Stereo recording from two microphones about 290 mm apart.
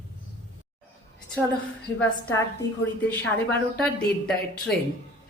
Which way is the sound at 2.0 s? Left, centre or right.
Centre.